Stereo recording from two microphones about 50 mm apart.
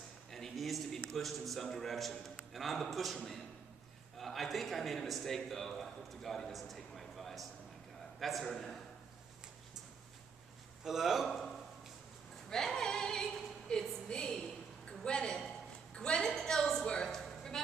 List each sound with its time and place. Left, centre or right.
0.3 s a man's voice: centre
10.8 s a man's voice: centre
11.2 s a man's voice: centre
12.4 s singing: centre
13.7 s a sound: centre